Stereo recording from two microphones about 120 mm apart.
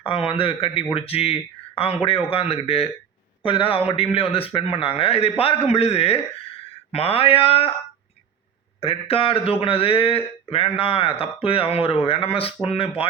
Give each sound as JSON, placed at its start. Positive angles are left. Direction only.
{"t": 0.0, "sound": "speech", "side_deg": 50}
{"t": 8.8, "sound": "speech", "side_deg": 55}